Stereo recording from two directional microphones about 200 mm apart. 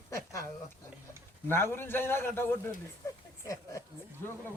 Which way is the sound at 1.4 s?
10° left (ahead or behind).